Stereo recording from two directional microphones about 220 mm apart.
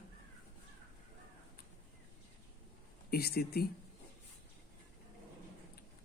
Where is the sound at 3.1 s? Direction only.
45° left (ahead or behind).